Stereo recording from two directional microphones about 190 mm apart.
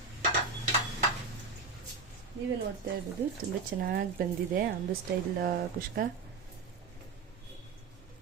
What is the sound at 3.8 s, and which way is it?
Speech, 50° right (ahead or behind).